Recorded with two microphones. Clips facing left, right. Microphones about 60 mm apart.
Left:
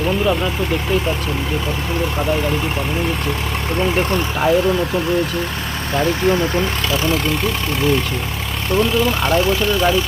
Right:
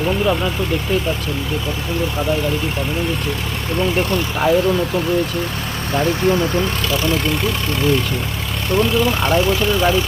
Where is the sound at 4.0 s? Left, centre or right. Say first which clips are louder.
Left 1 dB; left.